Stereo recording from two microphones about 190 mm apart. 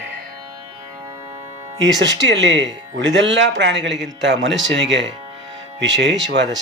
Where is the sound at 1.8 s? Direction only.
70° right (ahead or behind).